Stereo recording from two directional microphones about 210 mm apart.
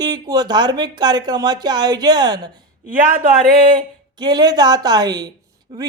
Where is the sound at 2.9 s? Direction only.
40° right (ahead or behind).